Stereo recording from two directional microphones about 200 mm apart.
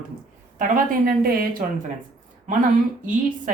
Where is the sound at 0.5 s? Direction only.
45° right (ahead or behind).